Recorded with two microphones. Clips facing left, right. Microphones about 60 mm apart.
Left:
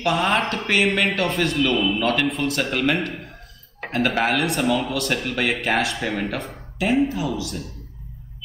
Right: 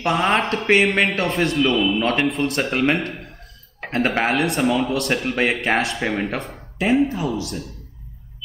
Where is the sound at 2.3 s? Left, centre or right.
Right.